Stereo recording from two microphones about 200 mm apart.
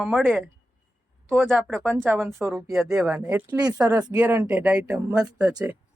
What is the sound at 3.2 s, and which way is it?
Speech, 15° right (ahead or behind).